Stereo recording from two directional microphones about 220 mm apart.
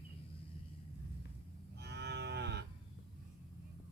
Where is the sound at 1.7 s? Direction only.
50° right (ahead or behind).